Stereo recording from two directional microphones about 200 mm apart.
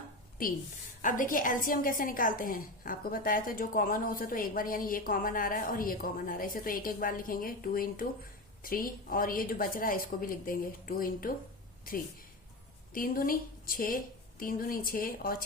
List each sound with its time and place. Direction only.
1.0 s a woman's voice: 40° left (ahead or behind)
12.9 s a woman's voice: 45° left (ahead or behind)